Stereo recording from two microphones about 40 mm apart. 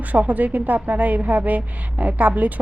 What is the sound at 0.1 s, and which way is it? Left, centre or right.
A woman's voice, right.